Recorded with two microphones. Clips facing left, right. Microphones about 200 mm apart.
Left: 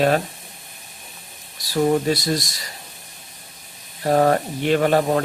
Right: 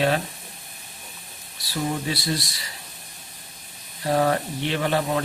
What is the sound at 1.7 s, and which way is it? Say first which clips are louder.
Speech: left 8 dB; 45° left (ahead or behind).